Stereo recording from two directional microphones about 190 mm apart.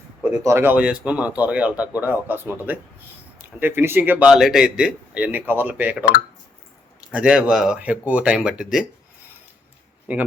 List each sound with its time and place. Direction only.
0.4 s speech: 10° right (ahead or behind)
7.1 s speech: 5° right (ahead or behind)
10.1 s speech: 10° right (ahead or behind)